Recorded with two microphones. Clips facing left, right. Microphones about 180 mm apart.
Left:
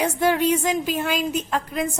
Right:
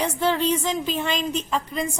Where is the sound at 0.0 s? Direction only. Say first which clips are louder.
Left 2 dB; 10° left (ahead or behind).